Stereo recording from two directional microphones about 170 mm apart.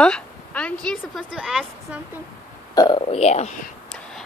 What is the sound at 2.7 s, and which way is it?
Speech, 25° left (ahead or behind).